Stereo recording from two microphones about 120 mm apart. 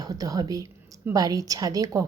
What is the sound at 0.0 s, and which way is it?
A woman's voice, 30° right (ahead or behind).